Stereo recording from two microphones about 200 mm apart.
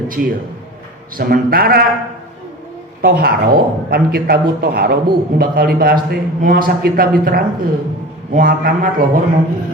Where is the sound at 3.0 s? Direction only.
50° right (ahead or behind).